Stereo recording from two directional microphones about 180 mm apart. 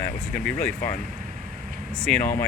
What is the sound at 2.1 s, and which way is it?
Speech, 5° left (ahead or behind).